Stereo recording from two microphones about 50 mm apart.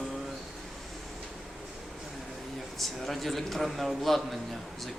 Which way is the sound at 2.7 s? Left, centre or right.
Centre.